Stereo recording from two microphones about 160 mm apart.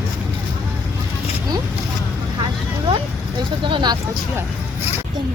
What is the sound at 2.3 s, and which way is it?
Vehicle, 30° right (ahead or behind).